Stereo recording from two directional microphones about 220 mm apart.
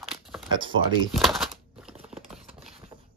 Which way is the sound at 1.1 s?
Centre (ahead or behind).